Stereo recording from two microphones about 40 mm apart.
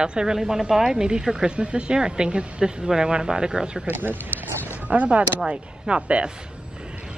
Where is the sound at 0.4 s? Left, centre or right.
Centre.